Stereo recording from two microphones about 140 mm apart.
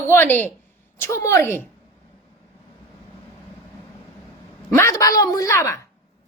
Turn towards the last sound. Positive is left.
turn(degrees=20)  # may be behind; listen again after turning